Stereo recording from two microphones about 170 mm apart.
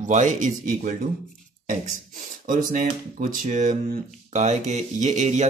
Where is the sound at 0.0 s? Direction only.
45° right (ahead or behind).